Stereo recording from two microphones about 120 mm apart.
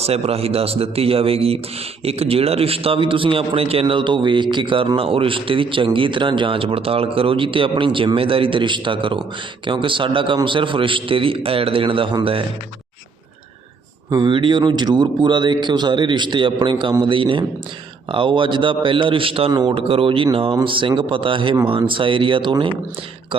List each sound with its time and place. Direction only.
0.0 s a man's voice: 55° right (ahead or behind)
14.1 s a man's voice: 40° right (ahead or behind)